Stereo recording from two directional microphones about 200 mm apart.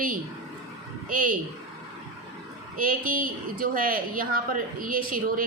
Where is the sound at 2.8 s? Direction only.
45° right (ahead or behind).